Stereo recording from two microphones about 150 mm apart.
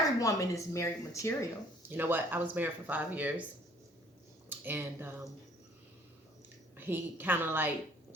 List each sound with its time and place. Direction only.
0.2 s speech: 20° left (ahead or behind)
1.9 s speech: 15° right (ahead or behind)
4.4 s speech: 15° right (ahead or behind)
6.7 s speech: 15° right (ahead or behind)